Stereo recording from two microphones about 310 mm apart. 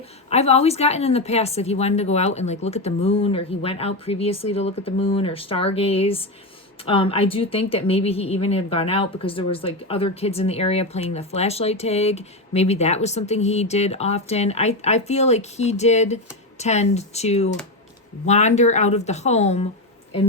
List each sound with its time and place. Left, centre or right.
0.3 s speech: centre